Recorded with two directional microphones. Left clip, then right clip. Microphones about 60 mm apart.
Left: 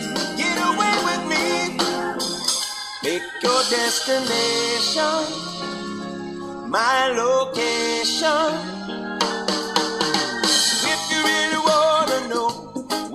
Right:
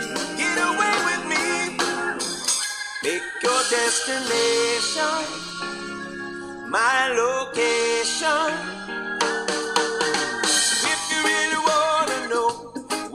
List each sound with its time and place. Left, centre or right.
0.1 s music: right
6.7 s music: right